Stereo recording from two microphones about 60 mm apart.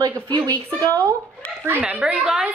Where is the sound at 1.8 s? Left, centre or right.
Centre.